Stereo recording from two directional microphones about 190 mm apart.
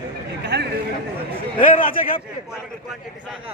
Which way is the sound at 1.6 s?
45° left (ahead or behind).